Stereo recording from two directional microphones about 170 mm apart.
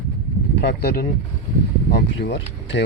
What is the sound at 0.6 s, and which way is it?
Speech, 70° left (ahead or behind).